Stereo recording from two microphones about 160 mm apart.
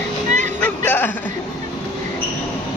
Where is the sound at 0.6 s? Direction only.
10° left (ahead or behind).